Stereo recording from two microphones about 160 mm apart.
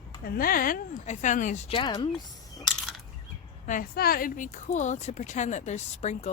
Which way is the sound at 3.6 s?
60° left (ahead or behind).